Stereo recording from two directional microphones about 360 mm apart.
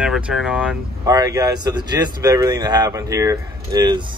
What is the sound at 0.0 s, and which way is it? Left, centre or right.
Speech, centre.